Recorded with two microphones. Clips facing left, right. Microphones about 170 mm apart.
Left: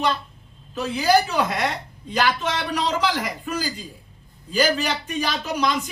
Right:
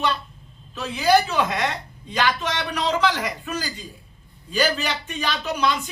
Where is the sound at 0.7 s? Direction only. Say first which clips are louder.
Left 4 dB; 15° left (ahead or behind).